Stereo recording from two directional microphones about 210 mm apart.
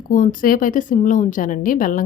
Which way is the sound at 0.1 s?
40° left (ahead or behind).